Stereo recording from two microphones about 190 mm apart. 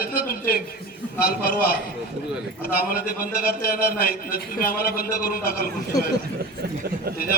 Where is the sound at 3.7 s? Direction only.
50° left (ahead or behind).